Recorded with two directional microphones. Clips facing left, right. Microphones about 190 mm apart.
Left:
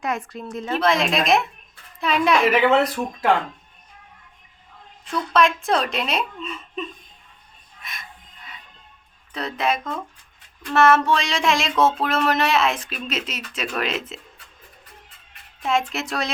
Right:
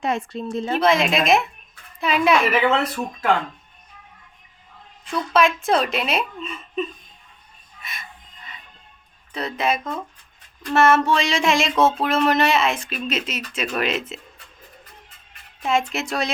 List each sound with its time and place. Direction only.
0.0 s speech: 25° right (ahead or behind)
0.8 s speech: centre (ahead or behind)
5.0 s speech: 5° right (ahead or behind)
7.8 s a sound: centre (ahead or behind)
9.3 s speech: centre (ahead or behind)
15.6 s speech: centre (ahead or behind)